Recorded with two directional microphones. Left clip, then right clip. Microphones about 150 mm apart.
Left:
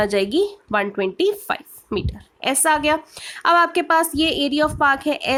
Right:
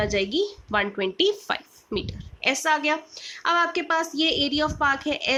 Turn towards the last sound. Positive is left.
turn(degrees=55)  # may be behind; listen again after turning